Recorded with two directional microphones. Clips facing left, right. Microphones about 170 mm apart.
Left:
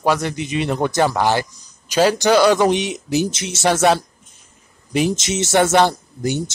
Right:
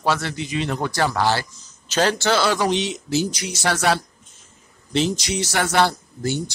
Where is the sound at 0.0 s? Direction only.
15° left (ahead or behind).